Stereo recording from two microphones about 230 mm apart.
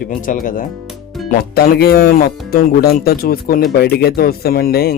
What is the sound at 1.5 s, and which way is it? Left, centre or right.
Speech, left.